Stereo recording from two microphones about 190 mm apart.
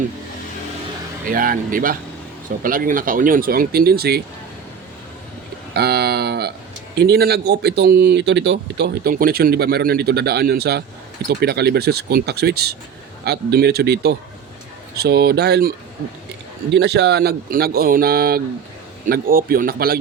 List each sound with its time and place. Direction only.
1.3 s speech: 50° right (ahead or behind)
5.7 s speech: 60° right (ahead or behind)
16.7 s speech: 60° right (ahead or behind)